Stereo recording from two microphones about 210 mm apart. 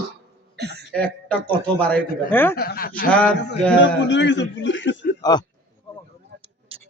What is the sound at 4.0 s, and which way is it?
A man's voice, 55° left (ahead or behind).